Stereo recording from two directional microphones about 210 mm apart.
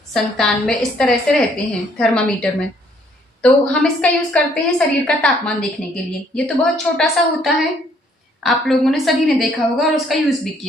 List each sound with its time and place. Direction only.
0.1 s a woman's voice: centre (ahead or behind)